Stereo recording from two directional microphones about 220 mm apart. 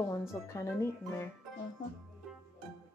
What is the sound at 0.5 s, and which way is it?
Speech, 15° left (ahead or behind).